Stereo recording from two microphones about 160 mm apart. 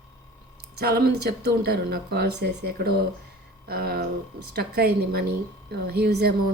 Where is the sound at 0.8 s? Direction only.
85° right.